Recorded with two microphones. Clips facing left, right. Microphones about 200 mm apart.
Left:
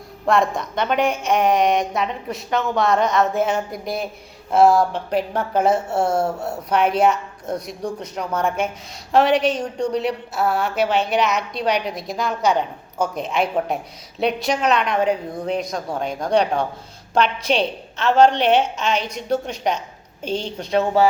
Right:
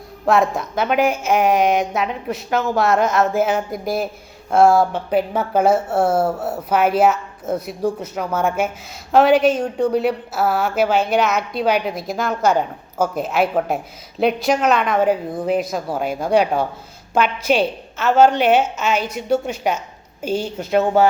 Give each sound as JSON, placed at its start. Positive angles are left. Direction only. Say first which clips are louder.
{"t": 0.3, "sound": "a woman's voice", "louder": "right 2 dB", "side_deg": -5}